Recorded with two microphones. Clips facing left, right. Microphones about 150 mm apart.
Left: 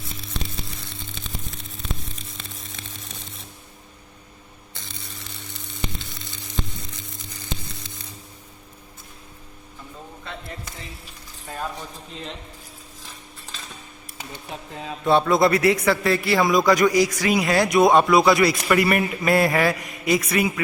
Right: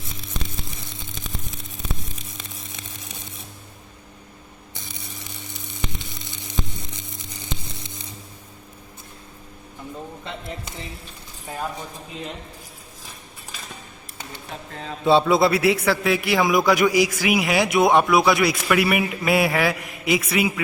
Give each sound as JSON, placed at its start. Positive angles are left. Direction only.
{"t": 0.7, "sound": "a sound", "side_deg": -15}
{"t": 4.7, "sound": "sizzle", "side_deg": -15}
{"t": 11.4, "sound": "a man's voice", "side_deg": -10}
{"t": 15.0, "sound": "a man's voice", "side_deg": -5}